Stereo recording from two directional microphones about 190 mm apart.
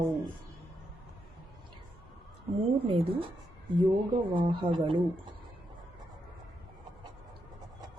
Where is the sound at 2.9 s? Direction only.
30° right (ahead or behind).